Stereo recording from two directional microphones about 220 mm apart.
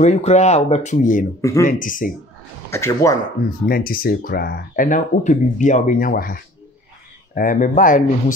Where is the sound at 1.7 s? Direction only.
35° left (ahead or behind).